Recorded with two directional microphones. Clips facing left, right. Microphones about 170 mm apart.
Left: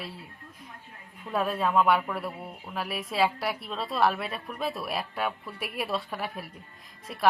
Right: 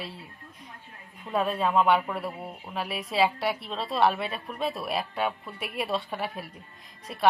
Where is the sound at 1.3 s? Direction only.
Centre (ahead or behind).